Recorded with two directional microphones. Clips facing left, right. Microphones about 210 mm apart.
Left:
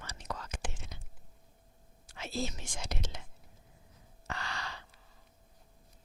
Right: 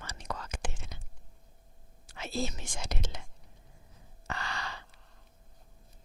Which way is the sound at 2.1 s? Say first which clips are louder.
Right 2 dB; 65° right (ahead or behind).